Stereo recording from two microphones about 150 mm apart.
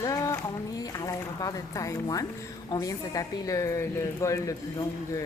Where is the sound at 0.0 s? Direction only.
20° left (ahead or behind).